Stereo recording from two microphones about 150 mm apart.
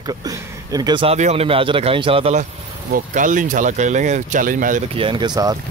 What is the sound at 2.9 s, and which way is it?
Speech, 60° right (ahead or behind).